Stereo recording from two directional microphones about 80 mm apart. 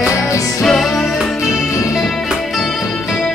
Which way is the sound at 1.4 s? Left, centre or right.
Left.